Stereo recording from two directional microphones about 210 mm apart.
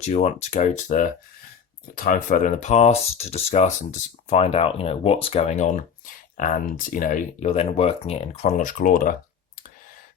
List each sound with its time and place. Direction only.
0.0 s speech: 30° left (ahead or behind)